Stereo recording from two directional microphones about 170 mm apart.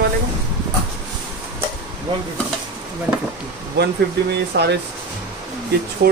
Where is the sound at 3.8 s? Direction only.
80° right.